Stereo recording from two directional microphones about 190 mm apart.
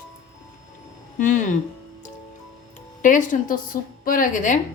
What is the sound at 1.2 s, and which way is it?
Speech, 40° left (ahead or behind).